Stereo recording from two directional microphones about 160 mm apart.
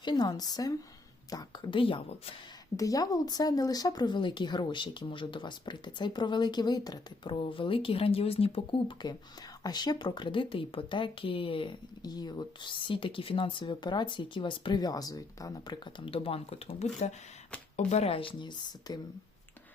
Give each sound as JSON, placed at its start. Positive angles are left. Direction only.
{"t": 0.0, "sound": "speech", "side_deg": 25}
{"t": 2.7, "sound": "speech", "side_deg": 20}